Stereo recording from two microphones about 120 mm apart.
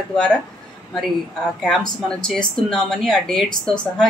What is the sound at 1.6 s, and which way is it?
Speech, 5° left (ahead or behind).